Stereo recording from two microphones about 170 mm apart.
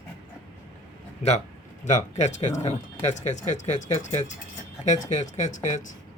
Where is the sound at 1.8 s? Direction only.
45° left (ahead or behind).